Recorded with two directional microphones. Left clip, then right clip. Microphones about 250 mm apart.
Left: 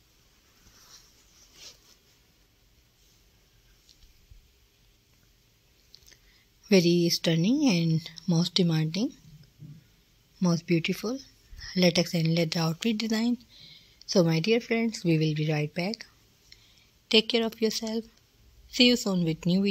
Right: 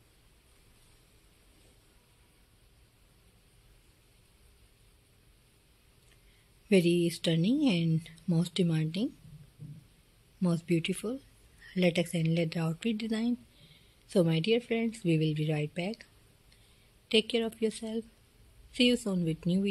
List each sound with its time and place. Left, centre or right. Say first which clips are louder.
6.7 s speech: left 4 dB; left
10.7 s speech: left 3 dB; centre
17.1 s speech: left 5 dB; left